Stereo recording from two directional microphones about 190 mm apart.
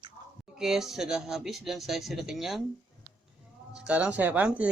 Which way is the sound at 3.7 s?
5° right (ahead or behind).